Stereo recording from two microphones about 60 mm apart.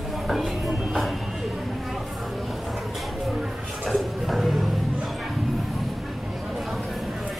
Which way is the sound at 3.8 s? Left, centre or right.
Centre.